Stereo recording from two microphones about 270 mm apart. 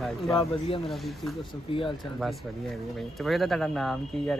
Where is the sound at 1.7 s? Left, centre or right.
Centre.